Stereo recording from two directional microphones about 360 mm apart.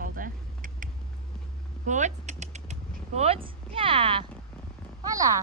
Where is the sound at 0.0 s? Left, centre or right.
Right.